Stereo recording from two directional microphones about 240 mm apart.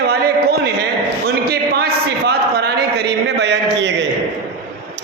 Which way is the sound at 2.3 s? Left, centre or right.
Right.